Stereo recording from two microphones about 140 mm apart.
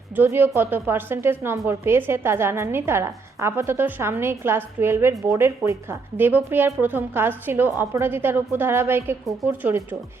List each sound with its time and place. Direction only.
0.2 s a woman's voice: 15° right (ahead or behind)